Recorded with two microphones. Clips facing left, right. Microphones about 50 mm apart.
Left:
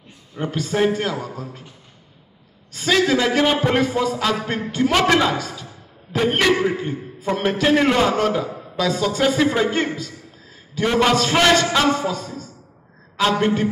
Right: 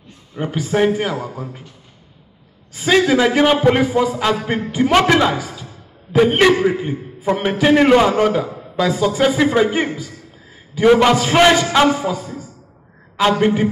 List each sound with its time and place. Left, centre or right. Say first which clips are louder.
0.4 s a man's voice: right 3 dB; centre
2.7 s a man's voice: right 3 dB; centre